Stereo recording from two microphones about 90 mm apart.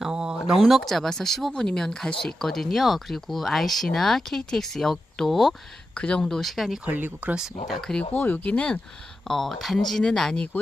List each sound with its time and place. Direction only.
0.0 s a sound: 10° right (ahead or behind)
0.6 s speech: centre (ahead or behind)
5.9 s speech: 10° left (ahead or behind)
6.8 s speech: 20° right (ahead or behind)
7.3 s speech: centre (ahead or behind)
8.1 s speech: 20° left (ahead or behind)